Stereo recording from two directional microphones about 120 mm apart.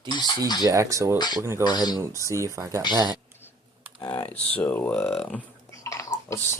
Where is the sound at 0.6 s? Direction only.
25° right (ahead or behind).